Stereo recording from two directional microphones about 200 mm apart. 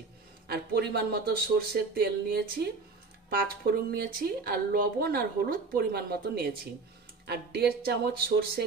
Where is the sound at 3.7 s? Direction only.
50° right (ahead or behind).